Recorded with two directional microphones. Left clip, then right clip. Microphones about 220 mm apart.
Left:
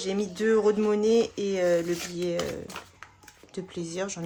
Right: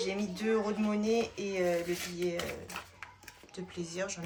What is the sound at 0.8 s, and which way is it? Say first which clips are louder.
A woman's voice: left 8 dB; 45° left (ahead or behind).